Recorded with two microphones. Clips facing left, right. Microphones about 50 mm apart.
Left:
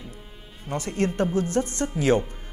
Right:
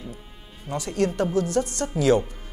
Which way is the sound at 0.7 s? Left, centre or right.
Left.